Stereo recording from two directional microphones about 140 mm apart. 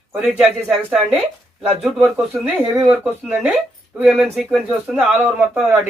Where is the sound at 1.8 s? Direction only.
Centre (ahead or behind).